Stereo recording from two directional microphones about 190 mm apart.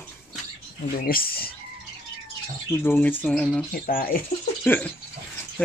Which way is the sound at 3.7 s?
50° left (ahead or behind).